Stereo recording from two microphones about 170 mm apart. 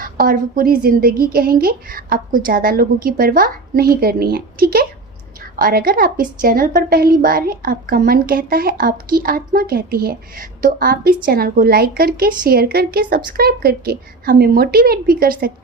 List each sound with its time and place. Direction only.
0.0 s a woman's voice: 55° right (ahead or behind)